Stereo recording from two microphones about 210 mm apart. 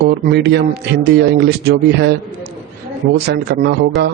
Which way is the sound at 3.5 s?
50° right (ahead or behind).